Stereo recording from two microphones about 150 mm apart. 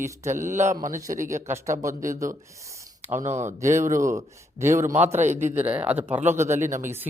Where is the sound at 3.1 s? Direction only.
50° right (ahead or behind).